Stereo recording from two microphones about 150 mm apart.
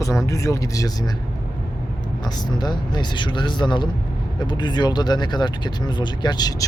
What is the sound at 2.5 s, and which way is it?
Speech, 30° left (ahead or behind).